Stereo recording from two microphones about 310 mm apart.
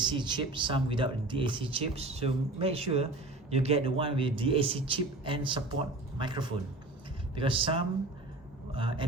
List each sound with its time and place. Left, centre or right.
0.0 s a man's voice: centre